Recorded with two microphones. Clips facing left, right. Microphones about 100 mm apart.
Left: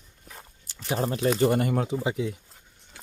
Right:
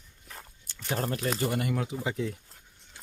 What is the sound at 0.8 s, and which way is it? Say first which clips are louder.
Speech: left 4 dB; 5° left (ahead or behind).